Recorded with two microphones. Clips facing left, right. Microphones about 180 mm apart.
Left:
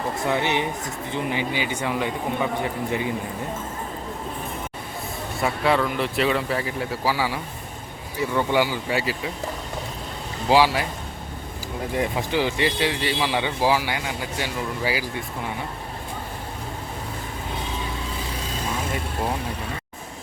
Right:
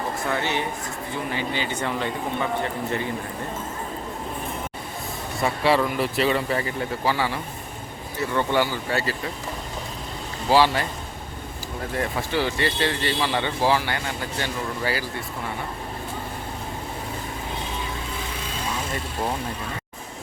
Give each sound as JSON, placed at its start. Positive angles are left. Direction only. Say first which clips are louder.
{"t": 0.3, "sound": "speech", "louder": "left 3 dB", "side_deg": 15}
{"t": 5.4, "sound": "speech", "louder": "right 1 dB", "side_deg": 0}
{"t": 10.5, "sound": "speech", "louder": "left 1 dB", "side_deg": 10}
{"t": 11.9, "sound": "speech", "louder": "left 2 dB", "side_deg": 15}